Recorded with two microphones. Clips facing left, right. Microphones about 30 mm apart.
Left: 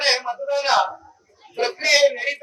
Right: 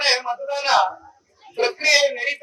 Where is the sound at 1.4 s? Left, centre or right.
Centre.